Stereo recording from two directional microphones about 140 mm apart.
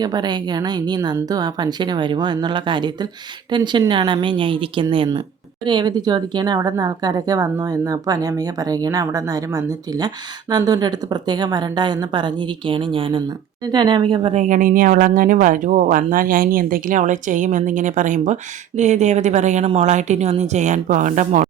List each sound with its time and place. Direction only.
0.0 s a woman's voice: 30° right (ahead or behind)
14.3 s a woman's voice: 65° right (ahead or behind)